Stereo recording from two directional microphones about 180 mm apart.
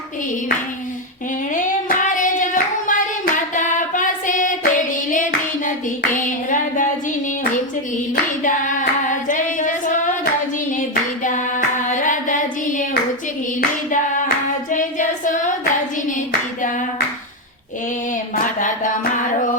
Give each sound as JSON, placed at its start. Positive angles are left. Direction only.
{"t": 1.5, "sound": "hands", "side_deg": 45}
{"t": 8.1, "sound": "singing", "side_deg": 45}
{"t": 10.8, "sound": "hands", "side_deg": 45}
{"t": 11.9, "sound": "singing", "side_deg": 45}
{"t": 14.7, "sound": "child singing", "side_deg": 45}